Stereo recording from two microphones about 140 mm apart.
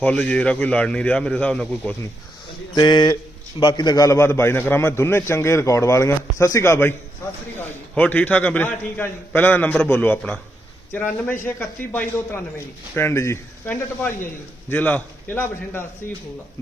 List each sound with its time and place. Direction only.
0.0 s a man's voice: 10° left (ahead or behind)
2.7 s a man's voice: 30° left (ahead or behind); by 15.9 s 15° left (ahead or behind)